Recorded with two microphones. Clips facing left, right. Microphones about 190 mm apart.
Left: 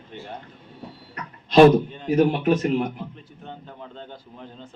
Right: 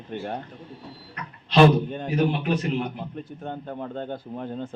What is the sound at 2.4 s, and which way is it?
Speech, 45° left (ahead or behind).